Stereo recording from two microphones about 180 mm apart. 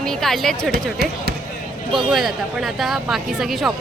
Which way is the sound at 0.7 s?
55° right (ahead or behind).